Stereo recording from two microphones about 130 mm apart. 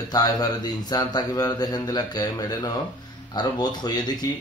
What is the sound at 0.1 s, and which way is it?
Speech, 30° left (ahead or behind).